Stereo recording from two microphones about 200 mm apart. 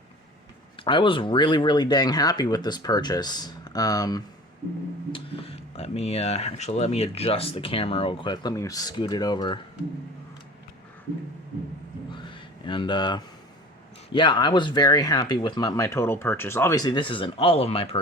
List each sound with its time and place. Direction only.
0.8 s speech: 25° left (ahead or behind)
5.1 s speech: 30° left (ahead or behind)
12.1 s a sound: 25° left (ahead or behind)
14.1 s speech: 25° left (ahead or behind)